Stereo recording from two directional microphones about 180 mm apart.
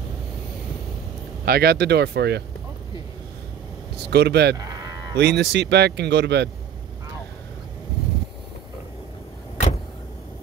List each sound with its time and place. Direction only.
1.4 s speech: 60° right (ahead or behind)
3.9 s speech: 65° right (ahead or behind)
4.6 s sheep: 20° right (ahead or behind)
5.1 s speech: 70° right (ahead or behind)